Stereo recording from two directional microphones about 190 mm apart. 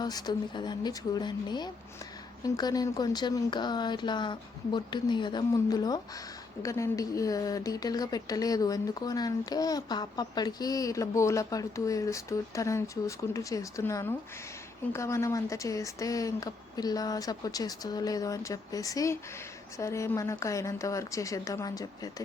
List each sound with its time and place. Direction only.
0.0 s a woman's voice: 20° left (ahead or behind)